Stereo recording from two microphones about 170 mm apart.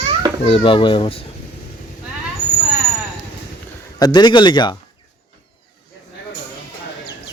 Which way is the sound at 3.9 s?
25° left (ahead or behind).